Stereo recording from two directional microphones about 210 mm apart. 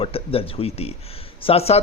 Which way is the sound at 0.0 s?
25° left (ahead or behind).